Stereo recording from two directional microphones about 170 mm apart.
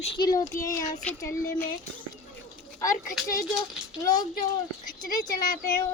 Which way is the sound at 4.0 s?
20° left (ahead or behind).